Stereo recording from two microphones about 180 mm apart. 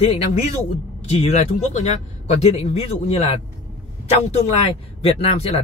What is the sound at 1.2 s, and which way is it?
Speech, 40° left (ahead or behind).